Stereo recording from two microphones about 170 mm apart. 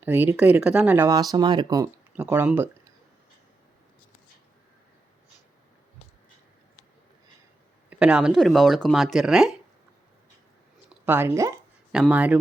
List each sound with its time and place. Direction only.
0.0 s speech: 10° right (ahead or behind)
2.1 s speech: 10° right (ahead or behind)
7.9 s speech: 5° right (ahead or behind)
11.0 s speech: 10° right (ahead or behind)
11.9 s speech: 5° right (ahead or behind)